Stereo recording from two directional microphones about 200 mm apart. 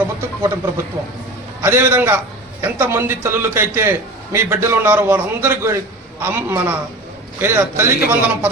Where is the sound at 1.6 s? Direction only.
10° right (ahead or behind).